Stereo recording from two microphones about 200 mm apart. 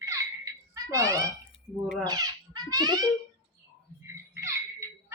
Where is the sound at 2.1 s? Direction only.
20° right (ahead or behind).